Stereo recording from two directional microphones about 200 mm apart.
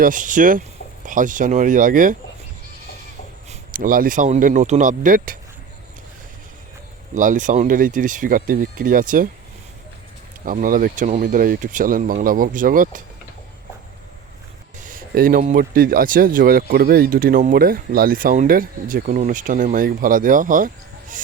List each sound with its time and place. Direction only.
0.0 s speech: 40° right (ahead or behind)
3.5 s speech: 45° right (ahead or behind)
7.1 s speech: 40° right (ahead or behind)
10.4 s speech: 45° right (ahead or behind)
14.8 s speech: 45° right (ahead or behind)